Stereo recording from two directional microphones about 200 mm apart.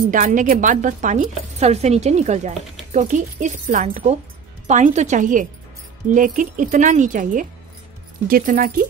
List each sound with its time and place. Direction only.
0.1 s speech: 40° right (ahead or behind)